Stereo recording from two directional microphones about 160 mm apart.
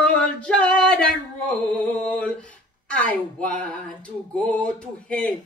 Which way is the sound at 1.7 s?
5° left (ahead or behind).